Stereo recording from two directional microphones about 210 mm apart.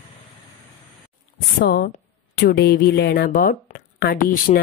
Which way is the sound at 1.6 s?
50° left (ahead or behind).